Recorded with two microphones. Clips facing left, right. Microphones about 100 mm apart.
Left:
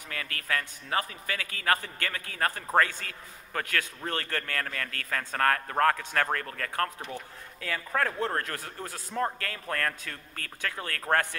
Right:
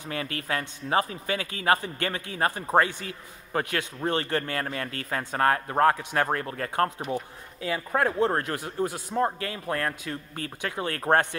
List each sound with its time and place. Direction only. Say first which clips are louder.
0.1 s a man's voice: right 3 dB; 25° right (ahead or behind)